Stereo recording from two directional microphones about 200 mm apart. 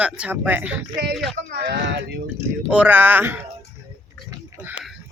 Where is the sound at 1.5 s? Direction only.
55° right (ahead or behind).